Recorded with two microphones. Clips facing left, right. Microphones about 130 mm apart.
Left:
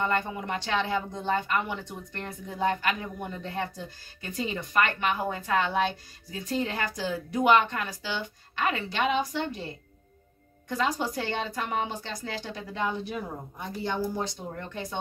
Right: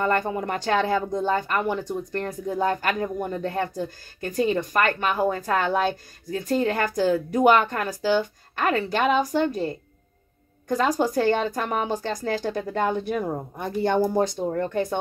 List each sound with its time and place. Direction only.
0.0 s speech: 45° right (ahead or behind)